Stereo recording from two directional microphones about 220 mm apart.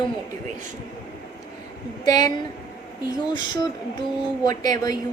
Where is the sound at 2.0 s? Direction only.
15° left (ahead or behind).